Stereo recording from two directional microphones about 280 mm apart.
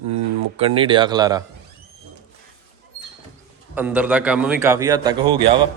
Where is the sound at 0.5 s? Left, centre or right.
Centre.